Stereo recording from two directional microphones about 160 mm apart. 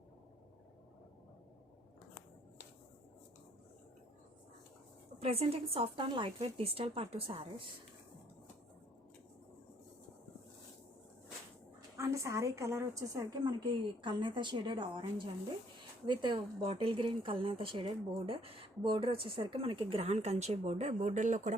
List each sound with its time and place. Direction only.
5.2 s speech: 40° right (ahead or behind)
11.9 s a woman's voice: 20° right (ahead or behind)
16.0 s a woman's voice: 30° right (ahead or behind); by 21.5 s 50° right (ahead or behind)